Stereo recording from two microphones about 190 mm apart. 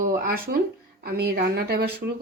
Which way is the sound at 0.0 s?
50° right (ahead or behind).